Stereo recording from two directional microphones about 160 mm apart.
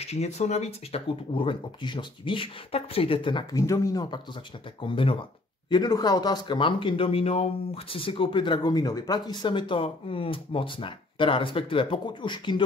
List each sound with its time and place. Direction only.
0.0 s speech: 45° left (ahead or behind)